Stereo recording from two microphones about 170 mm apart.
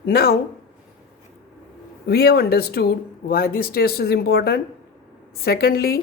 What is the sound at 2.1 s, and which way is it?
Speech, 70° left (ahead or behind).